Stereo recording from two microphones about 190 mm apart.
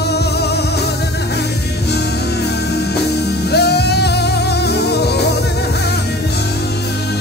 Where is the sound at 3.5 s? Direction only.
60° left (ahead or behind).